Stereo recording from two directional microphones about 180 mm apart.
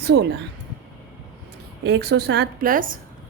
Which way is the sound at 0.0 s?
70° right (ahead or behind).